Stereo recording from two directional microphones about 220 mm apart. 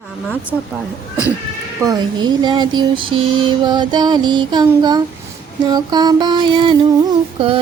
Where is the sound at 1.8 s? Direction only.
20° right (ahead or behind).